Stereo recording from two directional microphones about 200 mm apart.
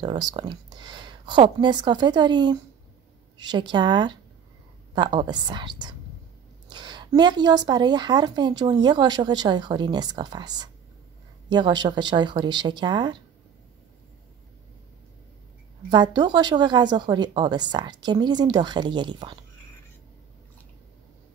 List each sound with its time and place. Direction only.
0.0 s a woman's voice: 20° right (ahead or behind)
15.9 s a woman's voice: 20° right (ahead or behind)